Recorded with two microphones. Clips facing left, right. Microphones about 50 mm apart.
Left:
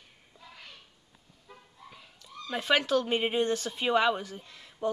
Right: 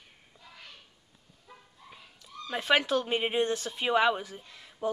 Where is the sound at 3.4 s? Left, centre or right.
Centre.